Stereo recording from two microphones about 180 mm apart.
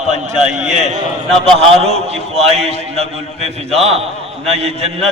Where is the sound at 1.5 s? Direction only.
35° right (ahead or behind).